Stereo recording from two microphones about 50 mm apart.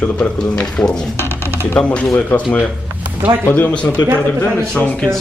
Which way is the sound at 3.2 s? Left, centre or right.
Right.